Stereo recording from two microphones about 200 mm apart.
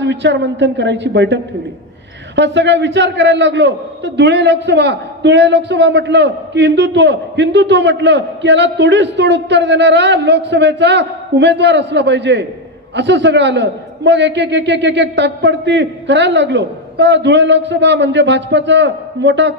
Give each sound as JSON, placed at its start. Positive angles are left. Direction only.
{"t": 0.0, "sound": "a man's voice", "side_deg": -60}